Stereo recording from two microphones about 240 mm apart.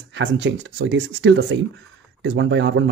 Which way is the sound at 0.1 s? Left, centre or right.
Right.